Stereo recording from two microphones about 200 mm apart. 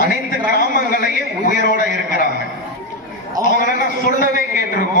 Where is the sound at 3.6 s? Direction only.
45° left (ahead or behind).